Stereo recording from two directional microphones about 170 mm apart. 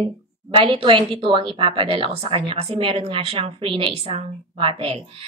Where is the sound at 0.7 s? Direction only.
30° right (ahead or behind).